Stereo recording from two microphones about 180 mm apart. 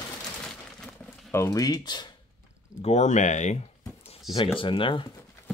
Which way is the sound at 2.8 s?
40° left (ahead or behind).